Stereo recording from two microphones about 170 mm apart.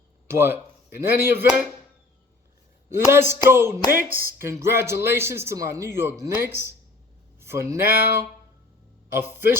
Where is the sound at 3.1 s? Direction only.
15° right (ahead or behind).